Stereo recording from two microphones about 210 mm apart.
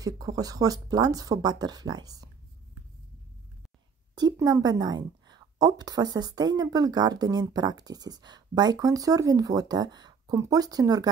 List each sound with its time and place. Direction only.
0.0 s speech: 15° right (ahead or behind)
4.1 s a woman's voice: 20° right (ahead or behind)